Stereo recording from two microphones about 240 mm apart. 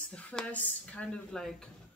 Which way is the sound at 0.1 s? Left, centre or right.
Centre.